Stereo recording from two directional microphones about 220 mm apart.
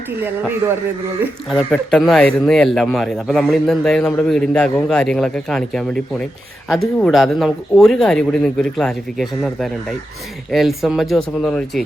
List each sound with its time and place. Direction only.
0.6 s a man's voice: 10° right (ahead or behind)
1.2 s a man's voice: centre (ahead or behind)